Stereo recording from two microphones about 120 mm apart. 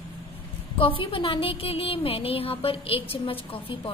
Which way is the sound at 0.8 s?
50° left (ahead or behind).